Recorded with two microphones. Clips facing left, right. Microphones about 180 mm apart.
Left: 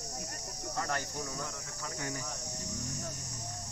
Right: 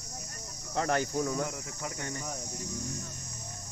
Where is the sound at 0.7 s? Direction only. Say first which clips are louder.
Right 7 dB; 65° right (ahead or behind).